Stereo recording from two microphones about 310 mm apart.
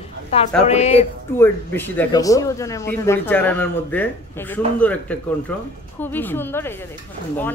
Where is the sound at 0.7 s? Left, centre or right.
Left.